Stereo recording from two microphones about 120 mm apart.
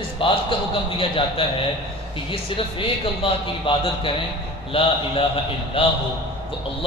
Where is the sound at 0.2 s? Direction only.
45° left (ahead or behind).